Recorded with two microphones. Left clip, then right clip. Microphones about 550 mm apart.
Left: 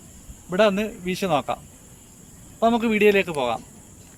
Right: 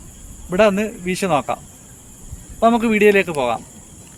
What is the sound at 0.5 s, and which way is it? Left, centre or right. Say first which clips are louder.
Speech: right 4 dB; left.